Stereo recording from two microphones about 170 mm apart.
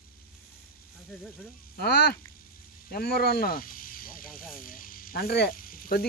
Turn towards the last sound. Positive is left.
turn(degrees=55)  # may be behind; listen again after turning